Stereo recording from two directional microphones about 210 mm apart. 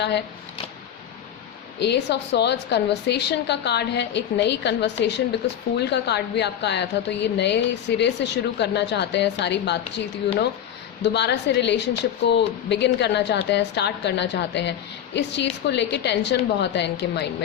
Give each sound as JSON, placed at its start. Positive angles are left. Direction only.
{"t": 1.8, "sound": "a woman's voice", "side_deg": 55}